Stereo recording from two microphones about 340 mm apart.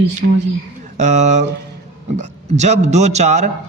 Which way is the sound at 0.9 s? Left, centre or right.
Right.